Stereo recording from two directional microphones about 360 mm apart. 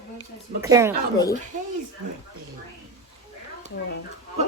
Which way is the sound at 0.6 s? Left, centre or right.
Centre.